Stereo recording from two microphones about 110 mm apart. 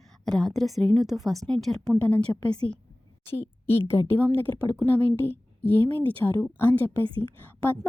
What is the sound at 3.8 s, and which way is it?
A woman's voice, 20° left (ahead or behind).